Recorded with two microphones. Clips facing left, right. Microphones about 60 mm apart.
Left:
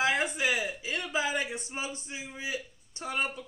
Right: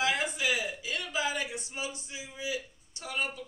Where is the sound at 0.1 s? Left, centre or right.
Left.